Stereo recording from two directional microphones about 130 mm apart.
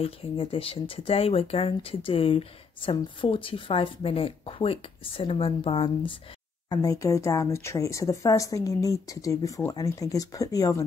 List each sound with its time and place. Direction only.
0.0 s speech: 45° left (ahead or behind)
6.7 s speech: 30° left (ahead or behind)